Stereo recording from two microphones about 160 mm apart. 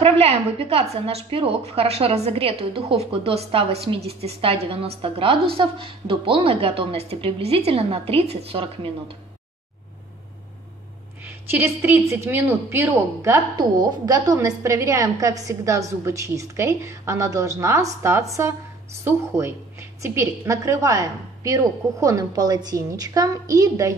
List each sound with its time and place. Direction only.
0.0 s a woman's voice: 40° right (ahead or behind)
11.2 s a woman's voice: 10° right (ahead or behind)